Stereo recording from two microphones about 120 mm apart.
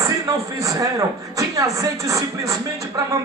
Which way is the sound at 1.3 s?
25° right (ahead or behind).